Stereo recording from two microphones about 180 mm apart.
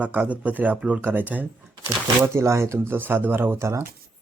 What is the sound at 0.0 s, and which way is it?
Speech, 10° right (ahead or behind).